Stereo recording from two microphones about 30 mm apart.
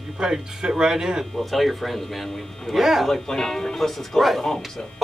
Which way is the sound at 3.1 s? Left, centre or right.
Centre.